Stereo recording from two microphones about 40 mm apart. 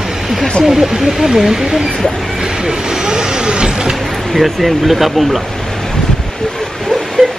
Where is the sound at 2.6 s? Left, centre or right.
Centre.